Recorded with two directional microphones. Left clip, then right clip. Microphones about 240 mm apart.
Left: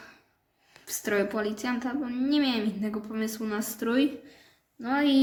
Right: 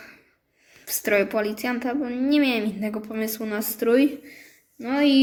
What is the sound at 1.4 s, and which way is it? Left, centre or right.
Speech, centre.